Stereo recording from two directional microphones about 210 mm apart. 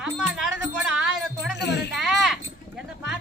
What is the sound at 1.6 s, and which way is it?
Music, 55° left (ahead or behind).